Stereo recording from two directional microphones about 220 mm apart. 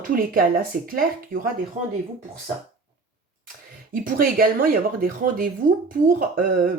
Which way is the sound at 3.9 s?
40° right (ahead or behind).